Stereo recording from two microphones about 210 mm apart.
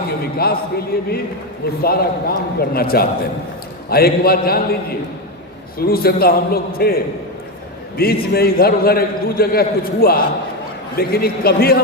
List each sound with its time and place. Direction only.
0.3 s a man's voice: 45° left (ahead or behind)
5.8 s a man's voice: 45° left (ahead or behind)